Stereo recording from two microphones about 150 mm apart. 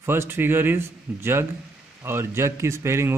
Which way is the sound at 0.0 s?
15° right (ahead or behind).